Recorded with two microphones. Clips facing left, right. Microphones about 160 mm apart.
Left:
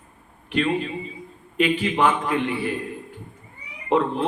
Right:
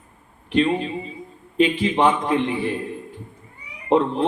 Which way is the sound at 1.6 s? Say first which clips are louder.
Right 2 dB; 35° right (ahead or behind).